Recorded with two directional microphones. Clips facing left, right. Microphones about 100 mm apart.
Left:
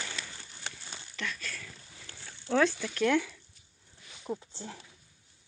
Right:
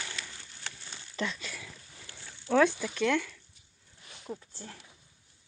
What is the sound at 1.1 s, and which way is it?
Speech, 30° right (ahead or behind).